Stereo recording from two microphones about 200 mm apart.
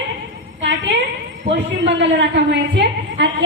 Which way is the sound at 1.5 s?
65° right (ahead or behind).